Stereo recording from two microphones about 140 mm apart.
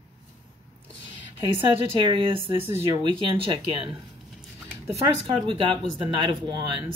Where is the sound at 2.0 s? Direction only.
35° right (ahead or behind).